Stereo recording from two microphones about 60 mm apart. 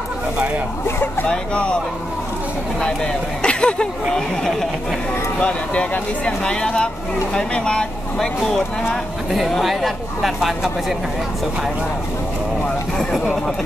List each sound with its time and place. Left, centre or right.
1.3 s speech: centre
2.8 s speech: centre
5.4 s speech: centre
12.9 s speech: centre